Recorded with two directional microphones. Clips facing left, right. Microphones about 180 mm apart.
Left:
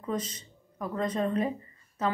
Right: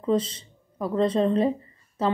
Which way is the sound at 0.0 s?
30° right (ahead or behind).